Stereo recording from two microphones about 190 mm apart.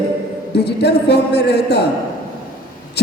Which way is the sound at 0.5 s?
60° left (ahead or behind).